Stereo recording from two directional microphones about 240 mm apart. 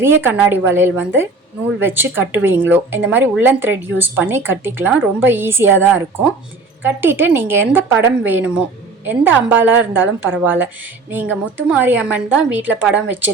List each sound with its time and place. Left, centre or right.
0.0 s a woman's voice: centre